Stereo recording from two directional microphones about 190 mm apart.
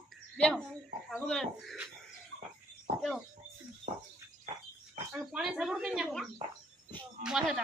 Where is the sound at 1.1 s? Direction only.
5° left (ahead or behind).